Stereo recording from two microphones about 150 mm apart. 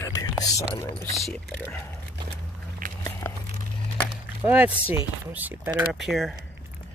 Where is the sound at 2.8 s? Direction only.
65° right (ahead or behind).